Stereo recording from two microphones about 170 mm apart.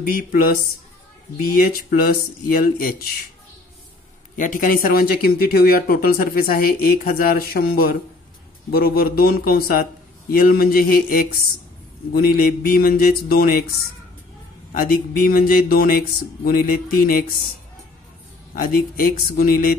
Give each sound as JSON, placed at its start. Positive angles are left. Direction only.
{"t": 0.0, "sound": "speech", "side_deg": 60}
{"t": 4.4, "sound": "speech", "side_deg": 50}
{"t": 14.7, "sound": "speech", "side_deg": 55}
{"t": 18.5, "sound": "speech", "side_deg": 55}